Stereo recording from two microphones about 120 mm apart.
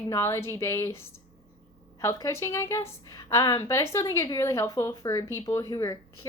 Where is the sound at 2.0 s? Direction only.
25° left (ahead or behind).